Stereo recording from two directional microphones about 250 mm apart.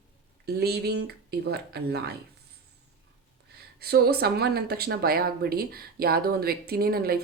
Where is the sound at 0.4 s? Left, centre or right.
Right.